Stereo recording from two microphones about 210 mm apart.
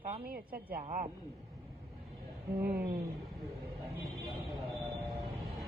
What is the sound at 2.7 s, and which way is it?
Speech, 45° right (ahead or behind).